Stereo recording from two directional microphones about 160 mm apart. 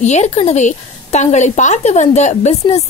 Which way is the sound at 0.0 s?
45° left (ahead or behind).